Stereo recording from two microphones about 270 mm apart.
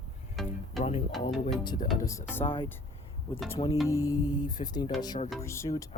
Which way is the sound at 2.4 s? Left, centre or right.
Centre.